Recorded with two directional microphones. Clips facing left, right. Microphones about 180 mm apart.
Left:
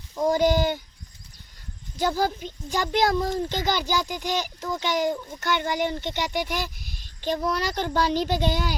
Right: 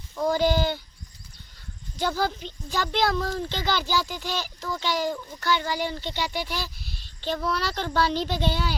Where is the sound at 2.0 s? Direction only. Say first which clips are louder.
Left 2 dB; 10° left (ahead or behind).